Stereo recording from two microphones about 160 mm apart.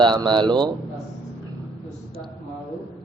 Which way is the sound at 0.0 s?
30° right (ahead or behind).